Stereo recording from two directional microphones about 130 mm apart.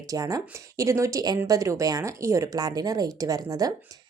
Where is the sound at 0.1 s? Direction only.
25° right (ahead or behind).